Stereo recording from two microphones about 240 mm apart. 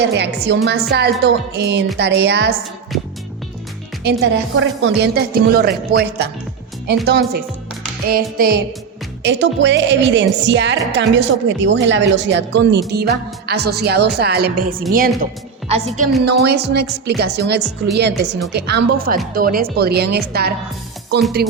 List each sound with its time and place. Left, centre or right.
0.0 s speech: right
4.0 s speech: right
16.2 s speech: right